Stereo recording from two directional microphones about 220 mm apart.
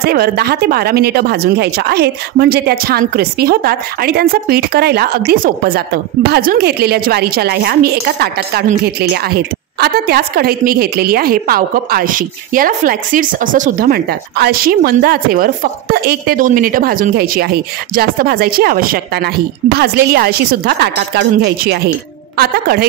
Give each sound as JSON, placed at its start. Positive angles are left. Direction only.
{"t": 0.0, "sound": "a woman's voice", "side_deg": -45}